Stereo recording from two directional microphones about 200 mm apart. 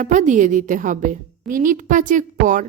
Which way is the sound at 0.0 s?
40° right (ahead or behind).